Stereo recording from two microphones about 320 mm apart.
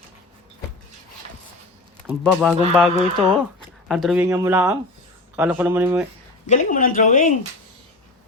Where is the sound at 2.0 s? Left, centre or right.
Centre.